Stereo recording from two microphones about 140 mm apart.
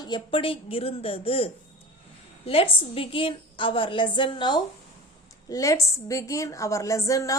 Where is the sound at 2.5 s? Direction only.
40° left (ahead or behind).